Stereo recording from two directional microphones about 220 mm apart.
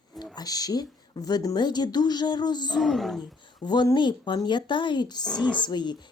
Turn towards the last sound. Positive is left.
turn(degrees=20)  # may be behind; listen again after turning